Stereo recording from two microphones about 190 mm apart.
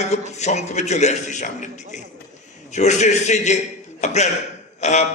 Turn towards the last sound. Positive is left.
turn(degrees=35)  # may be behind; listen again after turning